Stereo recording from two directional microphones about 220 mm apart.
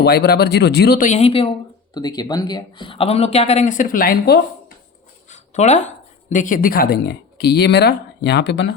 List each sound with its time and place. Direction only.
0.0 s a man's voice: 45° left (ahead or behind)